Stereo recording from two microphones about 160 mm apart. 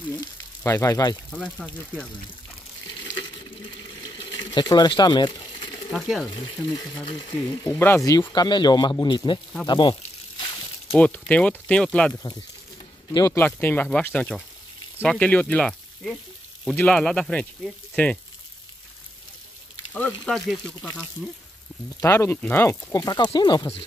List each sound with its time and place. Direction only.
0.2 s speech: 20° left (ahead or behind)
1.3 s speech: 5° left (ahead or behind)
4.0 s a sound: 30° left (ahead or behind)
5.9 s speech: centre (ahead or behind)
6.2 s speech: 25° left (ahead or behind)
9.7 s a sound: 30° left (ahead or behind)
10.9 s speech: 10° left (ahead or behind)
12.1 s speech: 20° left (ahead or behind)
19.9 s speech: 10° left (ahead or behind)
22.0 s speech: 15° left (ahead or behind)